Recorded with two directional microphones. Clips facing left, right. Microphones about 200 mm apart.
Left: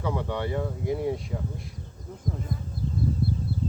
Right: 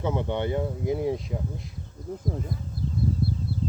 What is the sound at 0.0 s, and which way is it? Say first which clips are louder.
Speech: right 2 dB; 20° right (ahead or behind).